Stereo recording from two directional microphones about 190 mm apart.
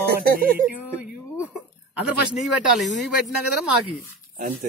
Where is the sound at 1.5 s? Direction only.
5° right (ahead or behind).